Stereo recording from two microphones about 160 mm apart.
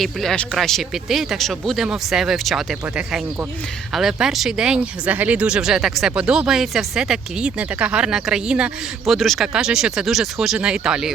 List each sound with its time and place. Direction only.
0.0 s speech: centre (ahead or behind)